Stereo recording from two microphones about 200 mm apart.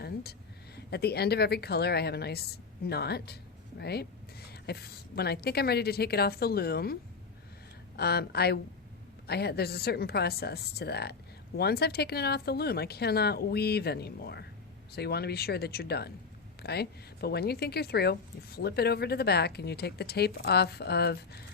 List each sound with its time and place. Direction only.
0.0 s a sound: 50° left (ahead or behind)
0.9 s a woman's voice: 55° left (ahead or behind)
7.9 s a woman's voice: 55° left (ahead or behind)